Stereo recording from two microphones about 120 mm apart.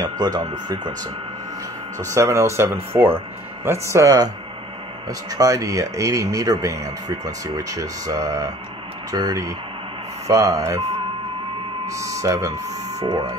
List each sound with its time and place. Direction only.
0.0 s speech: 35° right (ahead or behind)
2.0 s speech: 25° right (ahead or behind)
5.3 s speech: 30° right (ahead or behind)
11.8 s speech: 25° right (ahead or behind)